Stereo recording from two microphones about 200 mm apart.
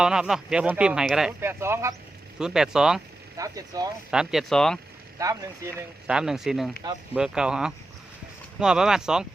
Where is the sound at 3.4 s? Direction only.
15° right (ahead or behind).